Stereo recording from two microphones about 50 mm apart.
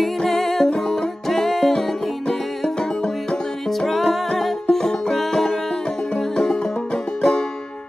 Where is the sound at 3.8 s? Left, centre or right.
Centre.